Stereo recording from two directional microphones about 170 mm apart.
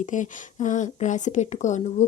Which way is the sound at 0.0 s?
45° left (ahead or behind).